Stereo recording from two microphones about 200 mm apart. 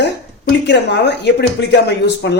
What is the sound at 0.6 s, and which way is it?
Speech, 60° left (ahead or behind).